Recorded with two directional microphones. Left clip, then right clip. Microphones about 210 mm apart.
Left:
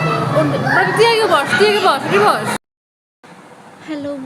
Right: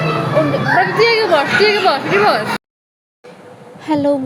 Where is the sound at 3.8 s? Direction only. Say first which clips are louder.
Right 10 dB; 30° right (ahead or behind).